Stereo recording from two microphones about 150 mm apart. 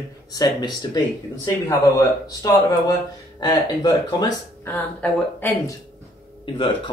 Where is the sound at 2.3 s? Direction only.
20° left (ahead or behind).